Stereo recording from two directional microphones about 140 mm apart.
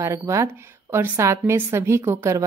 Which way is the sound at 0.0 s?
20° right (ahead or behind).